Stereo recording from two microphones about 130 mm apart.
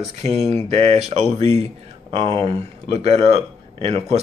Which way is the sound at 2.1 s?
45° right (ahead or behind).